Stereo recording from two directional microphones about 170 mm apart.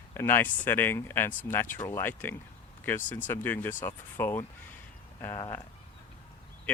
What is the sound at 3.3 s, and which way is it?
Speech, 10° left (ahead or behind).